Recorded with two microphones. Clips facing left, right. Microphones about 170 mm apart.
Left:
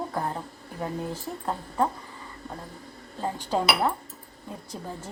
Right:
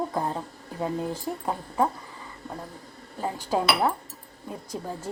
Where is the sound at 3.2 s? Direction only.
10° right (ahead or behind).